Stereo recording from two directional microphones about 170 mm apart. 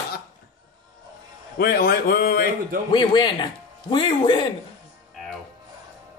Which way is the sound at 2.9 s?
30° left (ahead or behind).